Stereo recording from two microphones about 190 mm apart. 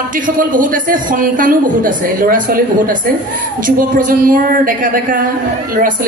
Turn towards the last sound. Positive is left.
turn(degrees=-45)  # may be behind; listen again after turning